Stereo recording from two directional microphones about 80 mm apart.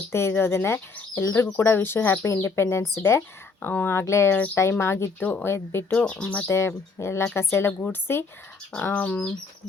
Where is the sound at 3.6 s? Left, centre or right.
Left.